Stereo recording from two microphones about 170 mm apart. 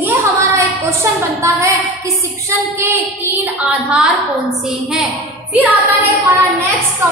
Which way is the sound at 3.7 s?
5° right (ahead or behind).